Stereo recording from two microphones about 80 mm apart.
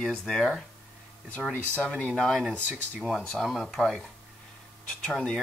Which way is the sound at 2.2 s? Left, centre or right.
Centre.